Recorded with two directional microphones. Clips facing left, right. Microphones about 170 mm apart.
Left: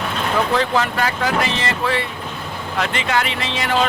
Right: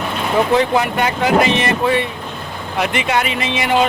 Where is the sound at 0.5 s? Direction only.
15° right (ahead or behind).